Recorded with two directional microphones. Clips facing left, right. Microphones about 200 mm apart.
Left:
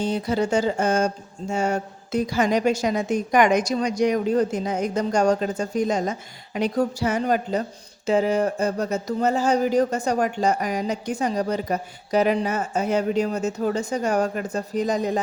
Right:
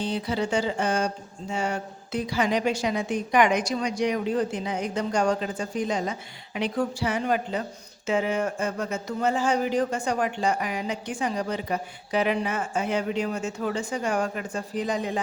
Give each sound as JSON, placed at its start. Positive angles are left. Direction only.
{"t": 0.0, "sound": "speech", "side_deg": 45}